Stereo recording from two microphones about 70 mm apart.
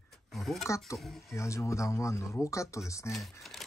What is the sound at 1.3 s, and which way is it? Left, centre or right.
Speech, left.